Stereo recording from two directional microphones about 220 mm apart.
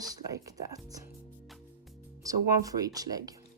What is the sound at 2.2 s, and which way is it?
Speech, 15° right (ahead or behind).